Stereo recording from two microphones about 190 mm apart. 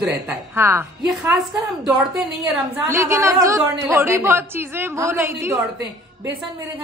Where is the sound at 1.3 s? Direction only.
Centre (ahead or behind).